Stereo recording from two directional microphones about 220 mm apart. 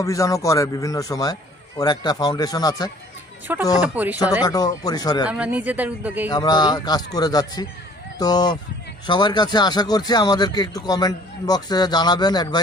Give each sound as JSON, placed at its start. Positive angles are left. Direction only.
{"t": 0.0, "sound": "speech", "side_deg": 15}
{"t": 3.4, "sound": "a woman's voice", "side_deg": -10}
{"t": 4.4, "sound": "speech", "side_deg": 15}
{"t": 5.3, "sound": "a woman's voice", "side_deg": -5}
{"t": 6.2, "sound": "speech", "side_deg": 20}